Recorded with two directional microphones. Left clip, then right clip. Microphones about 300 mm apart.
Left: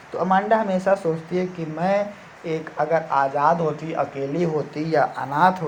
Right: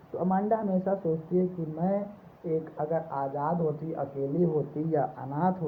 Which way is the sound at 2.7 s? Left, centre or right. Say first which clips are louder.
Left 10 dB; left.